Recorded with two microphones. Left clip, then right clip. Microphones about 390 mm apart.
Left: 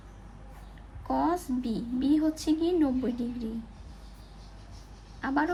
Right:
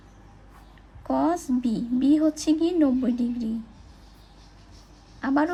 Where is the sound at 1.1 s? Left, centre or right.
Centre.